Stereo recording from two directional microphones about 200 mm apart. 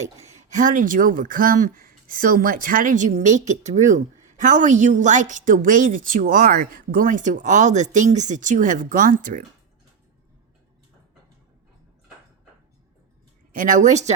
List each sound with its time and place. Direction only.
0.2 s speech: 35° right (ahead or behind)
13.5 s speech: 40° right (ahead or behind)